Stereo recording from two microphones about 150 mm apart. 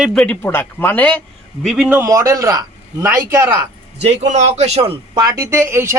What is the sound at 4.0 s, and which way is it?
Speech, 50° right (ahead or behind).